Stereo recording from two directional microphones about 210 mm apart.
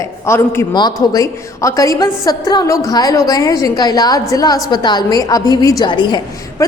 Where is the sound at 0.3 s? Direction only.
10° left (ahead or behind).